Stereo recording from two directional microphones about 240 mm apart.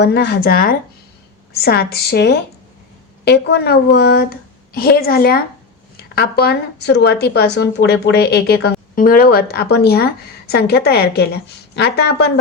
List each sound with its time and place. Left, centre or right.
0.0 s a woman's voice: left